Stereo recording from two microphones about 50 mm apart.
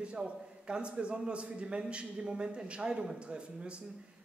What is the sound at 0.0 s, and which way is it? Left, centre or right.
Speech, right.